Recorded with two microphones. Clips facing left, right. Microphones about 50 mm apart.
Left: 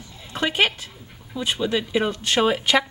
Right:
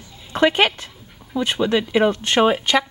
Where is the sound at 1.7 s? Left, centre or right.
Right.